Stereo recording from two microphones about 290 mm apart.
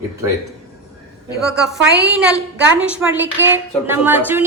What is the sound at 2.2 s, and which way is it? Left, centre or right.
A woman's voice, centre.